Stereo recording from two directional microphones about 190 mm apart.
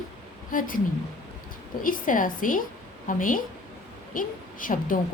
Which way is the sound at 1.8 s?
45° left (ahead or behind).